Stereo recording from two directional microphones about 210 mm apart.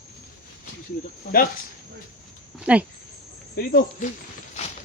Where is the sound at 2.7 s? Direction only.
5° right (ahead or behind).